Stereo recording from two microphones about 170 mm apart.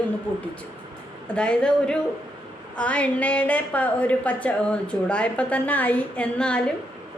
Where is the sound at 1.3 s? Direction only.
5° left (ahead or behind).